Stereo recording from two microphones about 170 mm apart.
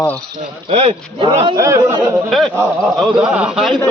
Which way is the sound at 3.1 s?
5° right (ahead or behind).